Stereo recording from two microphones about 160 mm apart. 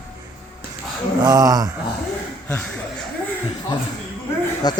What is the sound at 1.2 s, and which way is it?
Speech, 25° right (ahead or behind).